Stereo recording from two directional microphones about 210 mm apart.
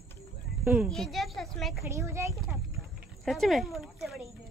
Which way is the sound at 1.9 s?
15° right (ahead or behind).